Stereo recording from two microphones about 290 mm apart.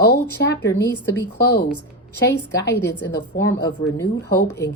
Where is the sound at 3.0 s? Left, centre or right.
Left.